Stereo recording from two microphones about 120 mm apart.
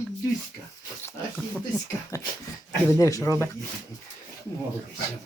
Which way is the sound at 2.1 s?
30° left (ahead or behind).